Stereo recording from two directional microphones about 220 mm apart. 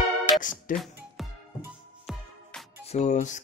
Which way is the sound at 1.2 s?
Centre (ahead or behind).